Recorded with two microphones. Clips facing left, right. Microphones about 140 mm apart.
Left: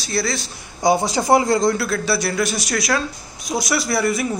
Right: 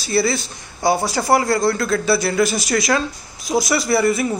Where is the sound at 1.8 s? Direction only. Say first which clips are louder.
Right 3 dB; centre (ahead or behind).